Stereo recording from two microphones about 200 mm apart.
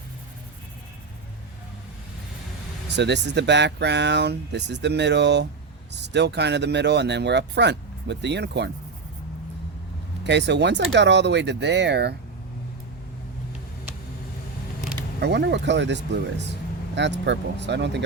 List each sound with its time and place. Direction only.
2.9 s speech: 60° right (ahead or behind)
10.2 s speech: 60° right (ahead or behind)
15.2 s speech: 55° right (ahead or behind)